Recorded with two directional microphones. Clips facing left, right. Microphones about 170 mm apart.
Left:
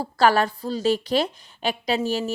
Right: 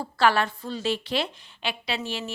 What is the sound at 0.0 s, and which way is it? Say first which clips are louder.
A woman's voice: left 3 dB; 40° left (ahead or behind).